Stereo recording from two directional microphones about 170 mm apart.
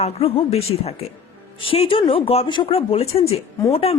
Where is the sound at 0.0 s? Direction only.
35° left (ahead or behind).